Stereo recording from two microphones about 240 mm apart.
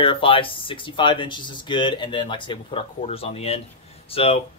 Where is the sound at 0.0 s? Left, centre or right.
Left.